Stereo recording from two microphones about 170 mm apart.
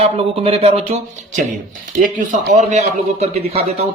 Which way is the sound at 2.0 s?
50° right (ahead or behind).